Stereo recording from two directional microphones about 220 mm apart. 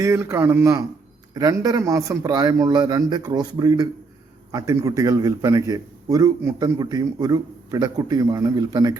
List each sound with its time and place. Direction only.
0.0 s a man's voice: 10° right (ahead or behind)